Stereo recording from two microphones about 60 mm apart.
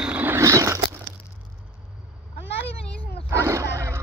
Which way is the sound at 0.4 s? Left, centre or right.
Right.